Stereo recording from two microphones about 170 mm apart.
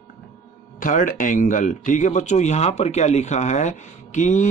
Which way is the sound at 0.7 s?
50° left (ahead or behind).